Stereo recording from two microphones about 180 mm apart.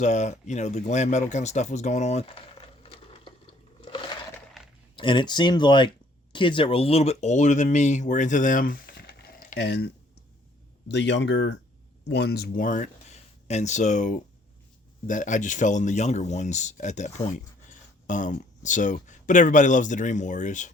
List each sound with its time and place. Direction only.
0.0 s speech: 40° left (ahead or behind)
4.6 s a sound: centre (ahead or behind)
4.9 s speech: 25° left (ahead or behind); by 9.0 s 55° left (ahead or behind)
9.6 s speech: 65° left (ahead or behind)
10.8 s speech: 75° left (ahead or behind)
12.0 s speech: 65° left (ahead or behind); by 20.7 s 45° left (ahead or behind)